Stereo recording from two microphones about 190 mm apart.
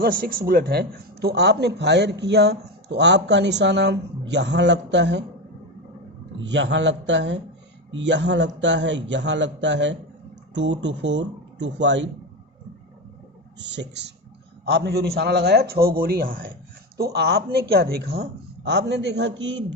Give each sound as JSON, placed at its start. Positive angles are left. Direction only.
{"t": 0.0, "sound": "a man's voice", "side_deg": -50}
{"t": 6.4, "sound": "a man's voice", "side_deg": -70}
{"t": 13.6, "sound": "a man's voice", "side_deg": -70}
{"t": 17.0, "sound": "speech", "side_deg": -60}